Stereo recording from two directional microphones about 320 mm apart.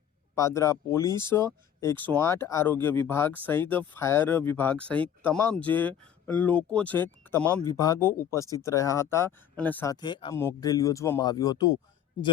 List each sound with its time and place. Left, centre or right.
0.3 s speech: centre